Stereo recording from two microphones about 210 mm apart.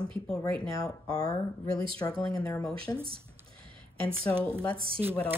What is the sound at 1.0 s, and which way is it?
Speech, 15° left (ahead or behind).